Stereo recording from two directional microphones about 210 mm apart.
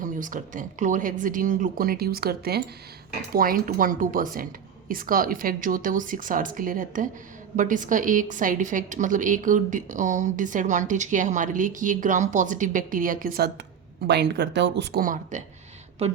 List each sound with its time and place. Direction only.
0.0 s a woman's voice: 40° right (ahead or behind); by 15.0 s 55° right (ahead or behind)
15.0 s a woman's voice: 40° right (ahead or behind)